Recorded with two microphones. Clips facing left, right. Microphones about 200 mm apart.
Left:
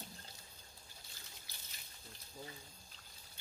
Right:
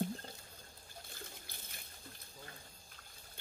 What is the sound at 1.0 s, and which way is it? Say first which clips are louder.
Trickle: right 8 dB; 55° right (ahead or behind).